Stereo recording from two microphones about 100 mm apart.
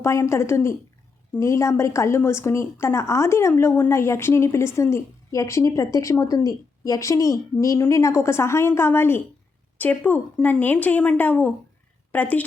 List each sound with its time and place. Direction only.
0.0 s a woman's voice: 30° left (ahead or behind)